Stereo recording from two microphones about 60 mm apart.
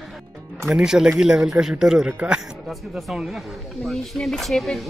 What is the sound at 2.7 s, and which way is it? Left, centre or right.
Speech, centre.